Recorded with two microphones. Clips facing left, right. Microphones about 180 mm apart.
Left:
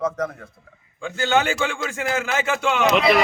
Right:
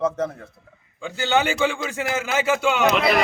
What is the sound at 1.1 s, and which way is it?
A man's voice, 15° right (ahead or behind).